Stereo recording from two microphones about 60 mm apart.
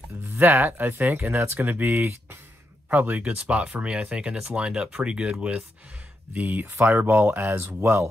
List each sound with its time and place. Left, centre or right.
0.4 s speech: right; by 5.6 s centre
6.3 s speech: right